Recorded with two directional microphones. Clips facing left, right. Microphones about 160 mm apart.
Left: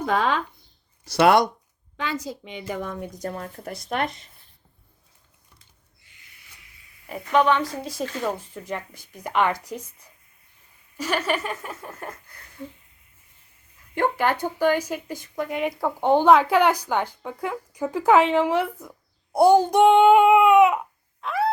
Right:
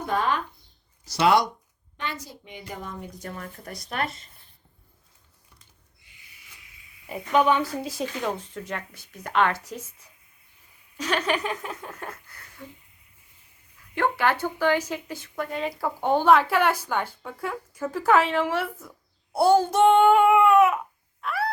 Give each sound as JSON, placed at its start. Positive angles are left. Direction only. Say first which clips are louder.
{"t": 0.0, "sound": "speech", "louder": "left 3 dB", "side_deg": 90}
{"t": 1.0, "sound": "speech", "louder": "left 3 dB", "side_deg": 60}
{"t": 2.2, "sound": "a woman's voice", "louder": "left 9 dB", "side_deg": 90}
{"t": 3.2, "sound": "speech", "louder": "left 5 dB", "side_deg": 35}
{"t": 3.8, "sound": "speech", "louder": "left 3 dB", "side_deg": 20}
{"t": 7.1, "sound": "speech", "louder": "left 1 dB", "side_deg": -5}
{"t": 8.4, "sound": "speech", "louder": "left 2 dB", "side_deg": 10}
{"t": 10.9, "sound": "speech", "louder": "left 1 dB", "side_deg": 10}
{"t": 13.9, "sound": "speech", "louder": "left 1 dB", "side_deg": 15}
{"t": 21.2, "sound": "a sound", "louder": "left 4 dB", "side_deg": 20}